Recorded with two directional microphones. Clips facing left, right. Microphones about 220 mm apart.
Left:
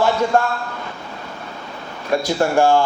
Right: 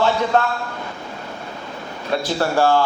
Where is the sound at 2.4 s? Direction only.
15° left (ahead or behind).